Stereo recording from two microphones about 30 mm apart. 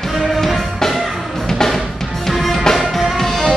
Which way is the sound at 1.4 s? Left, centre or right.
Centre.